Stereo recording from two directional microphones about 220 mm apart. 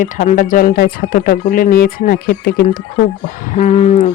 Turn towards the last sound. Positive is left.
turn(degrees=30)  # may be behind; listen again after turning